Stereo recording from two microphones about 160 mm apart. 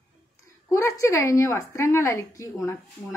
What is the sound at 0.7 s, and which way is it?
A woman's voice, 20° left (ahead or behind).